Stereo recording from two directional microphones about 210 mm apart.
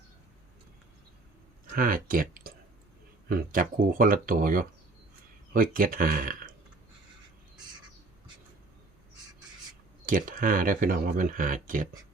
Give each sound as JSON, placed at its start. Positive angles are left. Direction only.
{"t": 1.7, "sound": "speech", "side_deg": -40}
{"t": 10.1, "sound": "speech", "side_deg": -40}